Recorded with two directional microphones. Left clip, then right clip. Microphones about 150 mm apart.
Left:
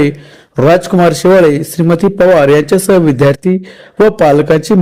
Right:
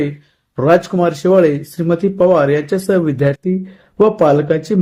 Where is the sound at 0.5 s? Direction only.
55° left (ahead or behind).